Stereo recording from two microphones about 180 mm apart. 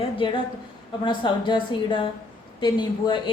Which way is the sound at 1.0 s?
25° left (ahead or behind).